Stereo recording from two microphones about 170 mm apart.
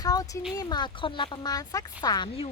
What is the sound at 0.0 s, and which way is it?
Speech, 20° left (ahead or behind).